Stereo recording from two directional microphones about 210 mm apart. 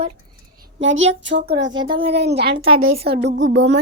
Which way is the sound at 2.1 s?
50° right (ahead or behind).